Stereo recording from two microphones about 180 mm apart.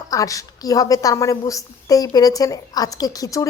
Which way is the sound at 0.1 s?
20° left (ahead or behind).